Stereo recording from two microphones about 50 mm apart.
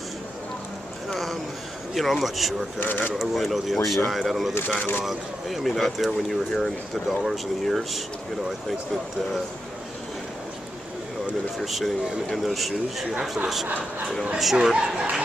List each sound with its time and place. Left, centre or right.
1.1 s a sound: centre
2.0 s speech: centre
2.8 s speech: left
3.2 s speech: centre
11.6 s speech: centre
14.4 s speech: centre
14.8 s speech: centre